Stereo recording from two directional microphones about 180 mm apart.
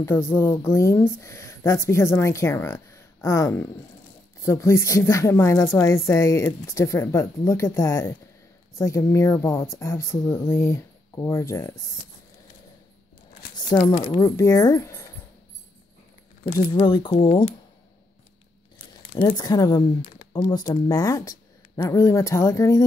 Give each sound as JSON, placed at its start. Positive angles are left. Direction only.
{"t": 0.0, "sound": "speech", "side_deg": 15}
{"t": 13.7, "sound": "speech", "side_deg": 20}
{"t": 16.8, "sound": "speech", "side_deg": 25}
{"t": 19.2, "sound": "speech", "side_deg": 20}